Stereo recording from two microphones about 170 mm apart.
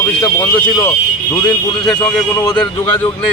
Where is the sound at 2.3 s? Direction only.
25° left (ahead or behind).